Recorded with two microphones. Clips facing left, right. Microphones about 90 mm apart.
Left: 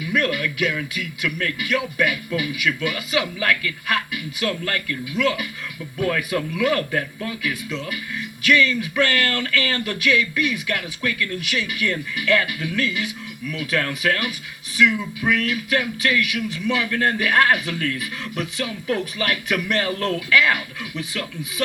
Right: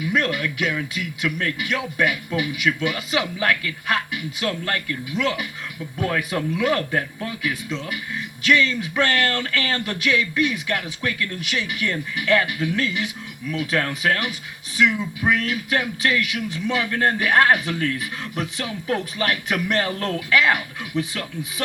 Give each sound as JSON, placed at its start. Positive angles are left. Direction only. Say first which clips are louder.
{"t": 0.0, "sound": "a man's voice", "louder": "even", "side_deg": -35}